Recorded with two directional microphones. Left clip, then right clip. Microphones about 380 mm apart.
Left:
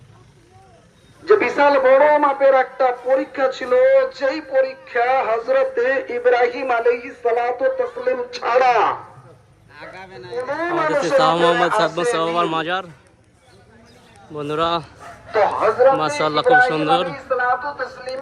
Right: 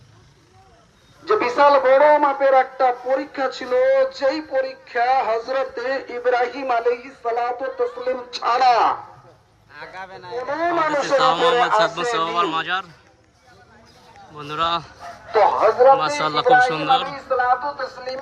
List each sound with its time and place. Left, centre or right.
1.2 s a man's voice: right
12.1 s speech: centre
14.3 s speech: centre
15.0 s a man's voice: right
16.0 s speech: centre
17.2 s a man's voice: right